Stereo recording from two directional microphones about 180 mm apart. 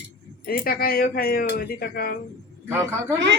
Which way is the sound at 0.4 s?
55° left (ahead or behind).